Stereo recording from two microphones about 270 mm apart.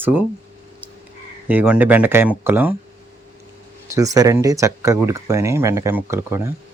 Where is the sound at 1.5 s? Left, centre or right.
Centre.